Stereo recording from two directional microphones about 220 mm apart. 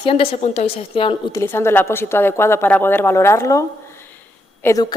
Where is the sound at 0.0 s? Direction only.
25° left (ahead or behind).